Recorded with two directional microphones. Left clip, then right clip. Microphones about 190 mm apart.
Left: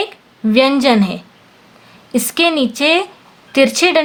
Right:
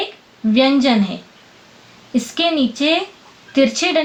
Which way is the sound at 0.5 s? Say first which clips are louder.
Left 3 dB; 50° left (ahead or behind).